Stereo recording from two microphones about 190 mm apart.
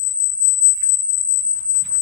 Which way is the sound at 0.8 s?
50° left (ahead or behind).